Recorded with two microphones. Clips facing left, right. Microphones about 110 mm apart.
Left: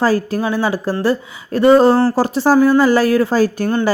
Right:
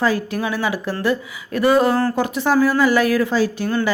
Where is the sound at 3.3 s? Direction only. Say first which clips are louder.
Left 4 dB; 45° left (ahead or behind).